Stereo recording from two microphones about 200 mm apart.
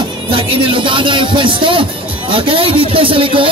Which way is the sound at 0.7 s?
25° right (ahead or behind).